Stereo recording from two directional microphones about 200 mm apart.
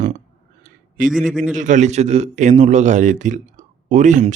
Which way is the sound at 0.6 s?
45° right (ahead or behind).